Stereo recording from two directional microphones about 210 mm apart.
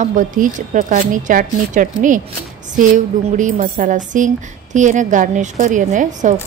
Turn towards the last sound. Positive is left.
turn(degrees=-35)  # may be behind; listen again after turning